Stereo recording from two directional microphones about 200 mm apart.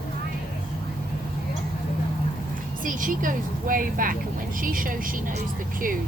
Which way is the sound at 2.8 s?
40° right (ahead or behind).